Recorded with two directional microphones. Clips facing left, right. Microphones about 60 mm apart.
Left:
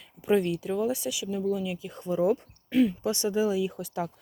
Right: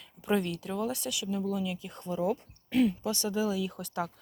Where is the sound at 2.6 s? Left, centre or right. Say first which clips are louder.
Left 3 dB; centre.